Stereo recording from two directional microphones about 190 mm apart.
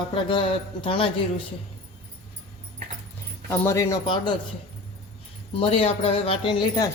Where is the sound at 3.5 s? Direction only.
10° left (ahead or behind).